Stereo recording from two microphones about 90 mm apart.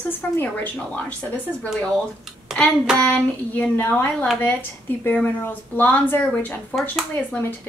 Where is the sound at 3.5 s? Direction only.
20° left (ahead or behind).